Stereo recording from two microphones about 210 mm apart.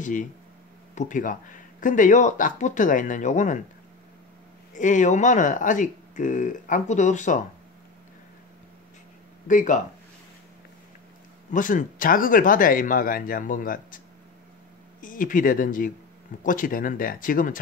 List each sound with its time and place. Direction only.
0.0 s speech: 40° left (ahead or behind)
4.7 s speech: 35° left (ahead or behind)
9.5 s speech: 35° left (ahead or behind)
11.5 s speech: 40° left (ahead or behind)